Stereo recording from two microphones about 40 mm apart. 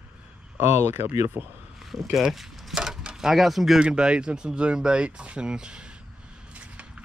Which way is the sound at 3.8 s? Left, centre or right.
Right.